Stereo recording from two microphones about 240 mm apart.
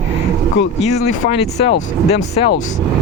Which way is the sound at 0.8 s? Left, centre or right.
Left.